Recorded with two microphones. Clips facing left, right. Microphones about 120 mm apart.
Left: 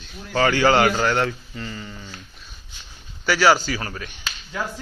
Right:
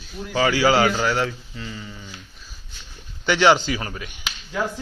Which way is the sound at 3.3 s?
20° right (ahead or behind).